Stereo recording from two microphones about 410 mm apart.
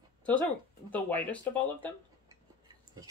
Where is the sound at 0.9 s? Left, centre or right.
Centre.